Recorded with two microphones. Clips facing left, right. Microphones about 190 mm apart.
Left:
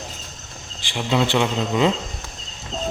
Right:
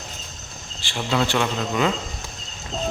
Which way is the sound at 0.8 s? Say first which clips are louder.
Left 2 dB; 15° left (ahead or behind).